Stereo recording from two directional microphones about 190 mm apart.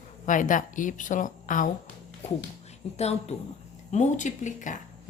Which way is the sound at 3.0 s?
35° left (ahead or behind).